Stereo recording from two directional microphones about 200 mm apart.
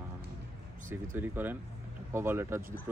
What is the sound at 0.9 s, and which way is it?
Speech, 10° right (ahead or behind).